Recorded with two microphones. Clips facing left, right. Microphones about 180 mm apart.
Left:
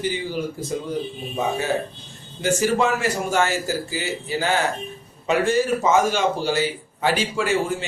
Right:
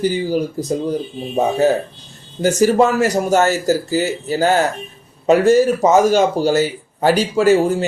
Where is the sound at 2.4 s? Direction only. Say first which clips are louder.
Right 7 dB; 40° right (ahead or behind).